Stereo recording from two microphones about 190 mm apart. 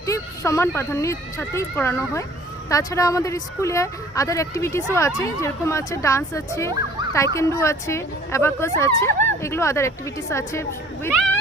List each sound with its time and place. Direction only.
0.0 s speech: 15° left (ahead or behind)